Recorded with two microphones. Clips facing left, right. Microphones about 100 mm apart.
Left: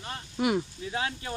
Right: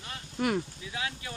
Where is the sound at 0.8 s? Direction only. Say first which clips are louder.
Left 5 dB; 40° left (ahead or behind).